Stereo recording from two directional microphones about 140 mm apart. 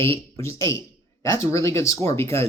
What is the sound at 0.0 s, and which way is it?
Speech, 20° left (ahead or behind).